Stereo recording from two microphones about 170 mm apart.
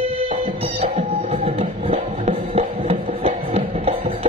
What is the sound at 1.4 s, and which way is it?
Music, 35° right (ahead or behind).